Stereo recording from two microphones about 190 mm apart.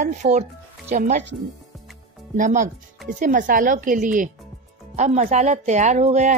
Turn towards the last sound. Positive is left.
turn(degrees=-35)  # may be behind; listen again after turning